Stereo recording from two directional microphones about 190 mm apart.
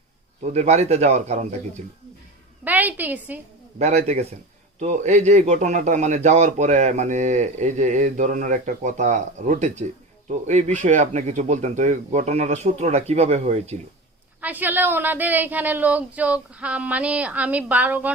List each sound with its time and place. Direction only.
0.5 s a man's voice: 35° right (ahead or behind)
2.6 s a woman's voice: 10° right (ahead or behind)
3.8 s a man's voice: 35° right (ahead or behind)
14.4 s a woman's voice: 10° right (ahead or behind)